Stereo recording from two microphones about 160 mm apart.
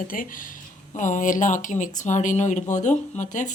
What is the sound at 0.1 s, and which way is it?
Speech, 60° left (ahead or behind).